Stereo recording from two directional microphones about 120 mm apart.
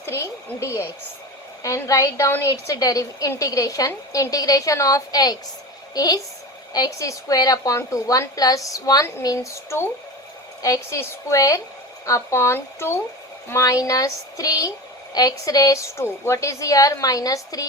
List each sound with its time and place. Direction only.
0.0 s a woman's voice: 25° left (ahead or behind)